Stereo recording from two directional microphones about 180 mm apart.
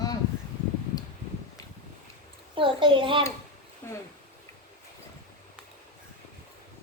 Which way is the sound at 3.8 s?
15° left (ahead or behind).